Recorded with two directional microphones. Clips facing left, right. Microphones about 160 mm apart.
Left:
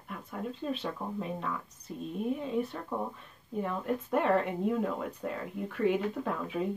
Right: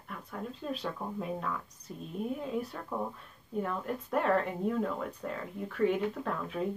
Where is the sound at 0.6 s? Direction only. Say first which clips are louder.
Left 1 dB; centre (ahead or behind).